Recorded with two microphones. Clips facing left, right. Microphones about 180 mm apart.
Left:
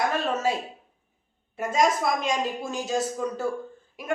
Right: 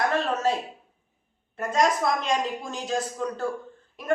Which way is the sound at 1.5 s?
5° left (ahead or behind).